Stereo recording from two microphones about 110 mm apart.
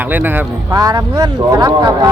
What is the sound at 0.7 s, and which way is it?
Speech, 35° right (ahead or behind).